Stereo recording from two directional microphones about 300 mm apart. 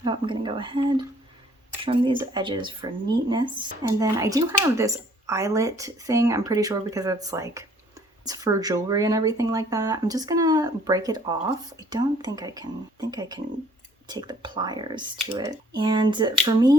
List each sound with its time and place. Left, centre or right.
0.0 s speech: centre